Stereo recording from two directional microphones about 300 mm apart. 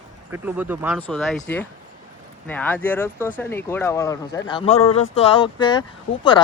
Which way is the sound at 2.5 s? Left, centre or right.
Centre.